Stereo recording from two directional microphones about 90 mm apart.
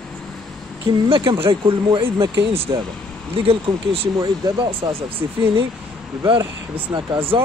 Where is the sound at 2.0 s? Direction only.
30° right (ahead or behind).